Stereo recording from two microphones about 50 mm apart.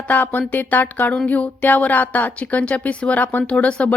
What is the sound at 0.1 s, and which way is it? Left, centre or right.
A woman's voice, left.